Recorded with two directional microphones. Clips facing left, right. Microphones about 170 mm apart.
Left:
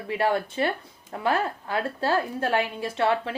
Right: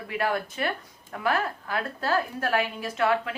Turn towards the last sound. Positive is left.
turn(degrees=30)  # may be behind; listen again after turning